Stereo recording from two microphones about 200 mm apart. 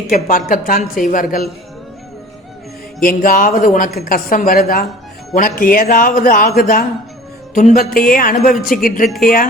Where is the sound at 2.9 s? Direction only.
45° left (ahead or behind).